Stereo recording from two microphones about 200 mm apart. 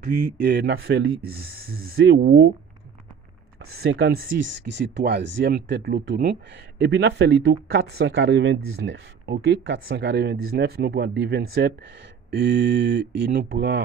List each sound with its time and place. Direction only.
0.0 s speech: 55° right (ahead or behind)
1.8 s speech: 90° right
2.1 s speech: 50° right (ahead or behind)
3.7 s speech: 60° right (ahead or behind)